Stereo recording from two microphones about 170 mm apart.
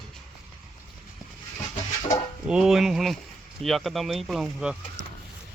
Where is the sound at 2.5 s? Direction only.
Centre (ahead or behind).